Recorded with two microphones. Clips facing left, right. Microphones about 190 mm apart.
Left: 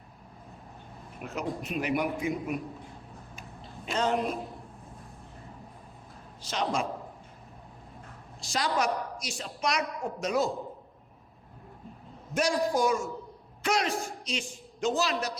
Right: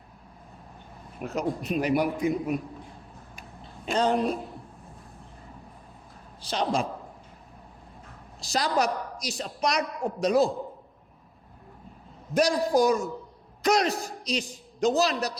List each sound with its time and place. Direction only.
1.4 s a woman's voice: 35° right (ahead or behind)
3.9 s a woman's voice: 35° right (ahead or behind)
6.4 s a woman's voice: 35° right (ahead or behind)
8.4 s a woman's voice: 35° right (ahead or behind)
12.3 s a woman's voice: 35° right (ahead or behind)